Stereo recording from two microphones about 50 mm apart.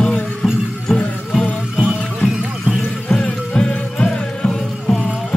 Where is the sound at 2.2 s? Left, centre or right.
Centre.